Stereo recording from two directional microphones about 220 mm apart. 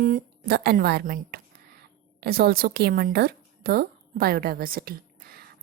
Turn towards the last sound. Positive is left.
turn(degrees=-45)  # may be behind; listen again after turning